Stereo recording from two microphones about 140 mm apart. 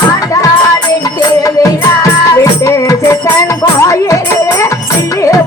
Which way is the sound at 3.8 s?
20° left (ahead or behind).